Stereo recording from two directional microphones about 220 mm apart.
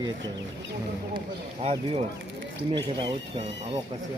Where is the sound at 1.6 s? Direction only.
25° right (ahead or behind).